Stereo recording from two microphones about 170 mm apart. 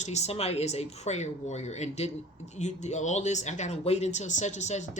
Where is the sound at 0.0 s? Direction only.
40° left (ahead or behind).